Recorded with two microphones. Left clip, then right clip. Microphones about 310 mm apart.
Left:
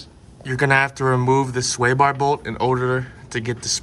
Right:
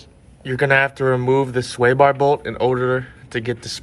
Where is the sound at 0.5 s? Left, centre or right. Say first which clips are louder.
Right 1 dB; centre.